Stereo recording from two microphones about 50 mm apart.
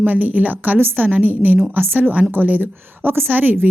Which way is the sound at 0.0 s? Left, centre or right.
Right.